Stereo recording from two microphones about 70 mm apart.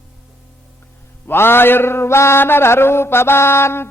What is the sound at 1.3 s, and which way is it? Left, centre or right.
Mantra, left.